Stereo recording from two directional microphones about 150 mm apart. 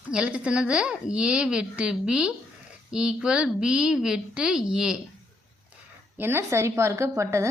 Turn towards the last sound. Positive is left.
turn(degrees=-20)  # may be behind; listen again after turning